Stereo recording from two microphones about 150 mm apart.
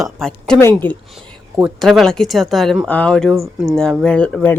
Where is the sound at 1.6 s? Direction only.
Centre (ahead or behind).